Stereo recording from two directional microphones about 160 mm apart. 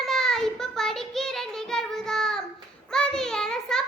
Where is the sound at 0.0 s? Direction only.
Centre (ahead or behind).